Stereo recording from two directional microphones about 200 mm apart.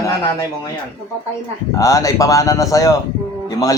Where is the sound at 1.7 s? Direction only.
15° left (ahead or behind).